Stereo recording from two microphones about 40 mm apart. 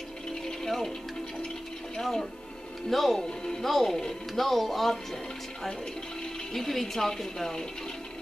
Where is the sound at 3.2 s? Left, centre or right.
Centre.